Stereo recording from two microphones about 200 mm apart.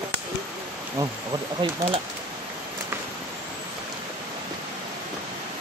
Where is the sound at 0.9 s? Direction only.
20° right (ahead or behind).